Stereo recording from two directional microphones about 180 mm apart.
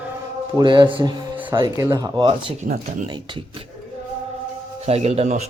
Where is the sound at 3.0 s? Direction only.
25° right (ahead or behind).